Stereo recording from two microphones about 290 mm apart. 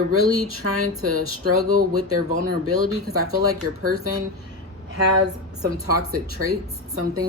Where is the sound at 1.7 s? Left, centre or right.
Right.